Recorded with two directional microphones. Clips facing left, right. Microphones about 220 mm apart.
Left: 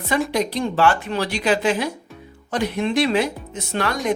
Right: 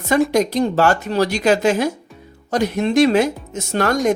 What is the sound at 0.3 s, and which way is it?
Speech, 45° right (ahead or behind).